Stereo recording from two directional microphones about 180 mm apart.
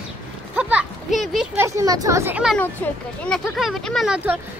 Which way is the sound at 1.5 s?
15° right (ahead or behind).